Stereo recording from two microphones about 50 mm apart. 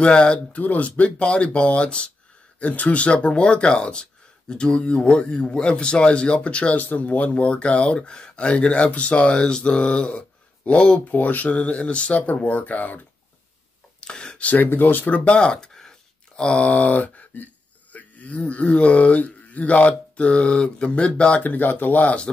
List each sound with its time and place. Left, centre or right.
0.0 s speech: centre
6.8 s speech: left
14.0 s a sound: centre
14.4 s speech: left
17.9 s a sound: left
18.7 s speech: left
21.4 s speech: left